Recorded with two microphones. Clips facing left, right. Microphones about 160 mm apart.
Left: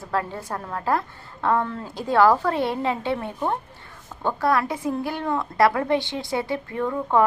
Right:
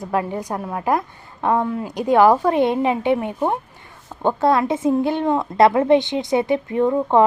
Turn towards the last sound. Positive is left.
turn(degrees=-20)  # may be behind; listen again after turning